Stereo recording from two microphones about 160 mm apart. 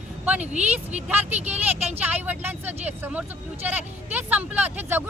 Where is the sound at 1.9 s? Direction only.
10° right (ahead or behind).